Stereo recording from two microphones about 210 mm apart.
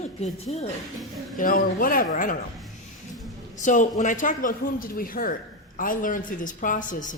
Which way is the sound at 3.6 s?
35° left (ahead or behind).